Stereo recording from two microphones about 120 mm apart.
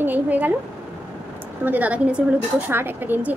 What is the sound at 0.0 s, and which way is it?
Speech, 15° right (ahead or behind).